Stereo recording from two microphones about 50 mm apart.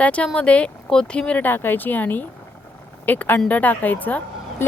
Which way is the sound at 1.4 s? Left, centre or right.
Left.